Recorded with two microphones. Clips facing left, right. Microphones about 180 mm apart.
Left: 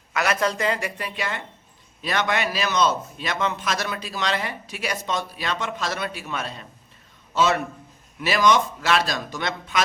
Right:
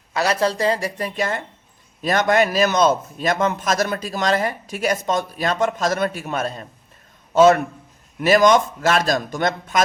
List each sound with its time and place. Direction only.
0.1 s a man's voice: 30° right (ahead or behind); by 9.8 s 45° right (ahead or behind)